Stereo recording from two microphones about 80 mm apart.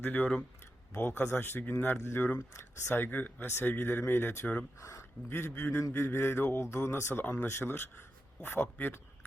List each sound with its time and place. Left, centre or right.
0.0 s speech: left
4.8 s speech: left